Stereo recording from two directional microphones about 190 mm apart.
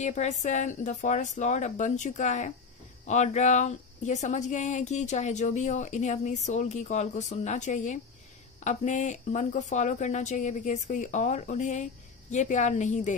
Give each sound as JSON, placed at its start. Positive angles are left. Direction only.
{"t": 0.0, "sound": "speech", "side_deg": 40}